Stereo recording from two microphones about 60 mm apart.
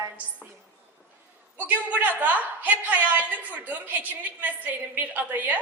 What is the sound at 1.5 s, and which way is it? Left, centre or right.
A woman's voice, right.